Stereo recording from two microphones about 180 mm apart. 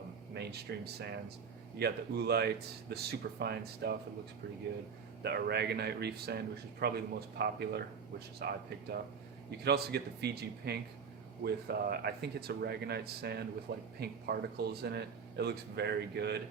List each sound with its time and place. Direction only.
0.3 s speech: 65° right (ahead or behind)
5.2 s speech: 65° right (ahead or behind)